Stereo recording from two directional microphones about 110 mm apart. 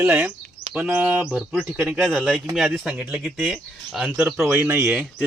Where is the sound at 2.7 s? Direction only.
10° right (ahead or behind).